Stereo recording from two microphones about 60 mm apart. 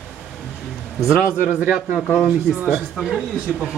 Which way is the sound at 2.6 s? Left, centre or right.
Right.